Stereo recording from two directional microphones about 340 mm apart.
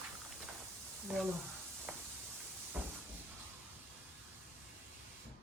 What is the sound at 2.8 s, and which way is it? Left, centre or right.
Vehicle, centre.